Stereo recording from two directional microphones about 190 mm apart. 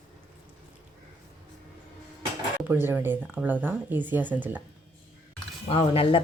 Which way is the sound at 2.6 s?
10° right (ahead or behind).